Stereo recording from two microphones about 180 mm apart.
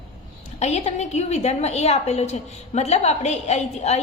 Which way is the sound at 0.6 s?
40° left (ahead or behind).